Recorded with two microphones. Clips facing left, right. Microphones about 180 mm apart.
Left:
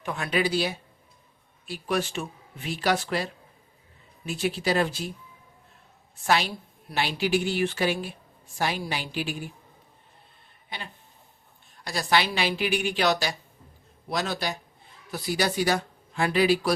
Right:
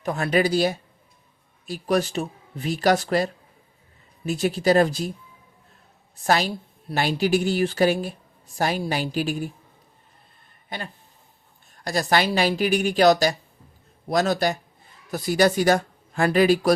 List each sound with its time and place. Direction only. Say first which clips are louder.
0.0 s speech: right 5 dB; 40° right (ahead or behind)
4.3 s speech: right 6 dB; 45° right (ahead or behind)
6.1 s speech: right 3 dB; 40° right (ahead or behind)
11.8 s speech: right 3 dB; 45° right (ahead or behind)